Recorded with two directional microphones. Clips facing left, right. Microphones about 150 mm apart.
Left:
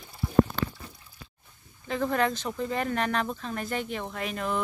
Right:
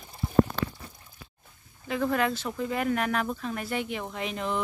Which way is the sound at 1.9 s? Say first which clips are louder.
Even; 5° right (ahead or behind).